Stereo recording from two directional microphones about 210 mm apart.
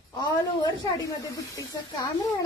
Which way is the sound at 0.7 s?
15° left (ahead or behind).